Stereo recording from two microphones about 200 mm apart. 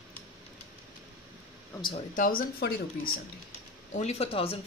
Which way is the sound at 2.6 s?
50° left (ahead or behind).